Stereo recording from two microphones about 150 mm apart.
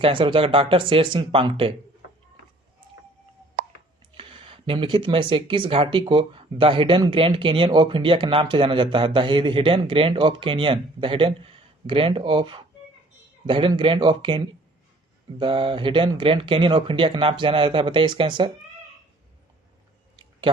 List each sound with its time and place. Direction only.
0.0 s speech: 35° right (ahead or behind)
4.2 s speech: 35° right (ahead or behind)